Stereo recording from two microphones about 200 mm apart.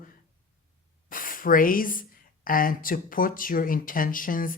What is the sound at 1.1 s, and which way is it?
Speech, 45° left (ahead or behind).